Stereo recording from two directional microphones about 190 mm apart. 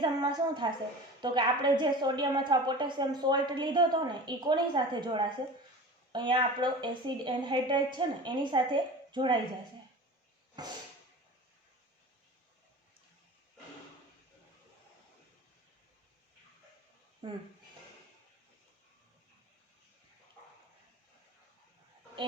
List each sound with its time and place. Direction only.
0.0 s a woman's voice: 20° right (ahead or behind)
10.6 s a woman's voice: 20° right (ahead or behind)